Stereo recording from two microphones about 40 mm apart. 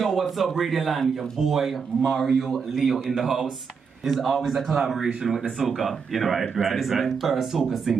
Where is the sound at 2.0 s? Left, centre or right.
Centre.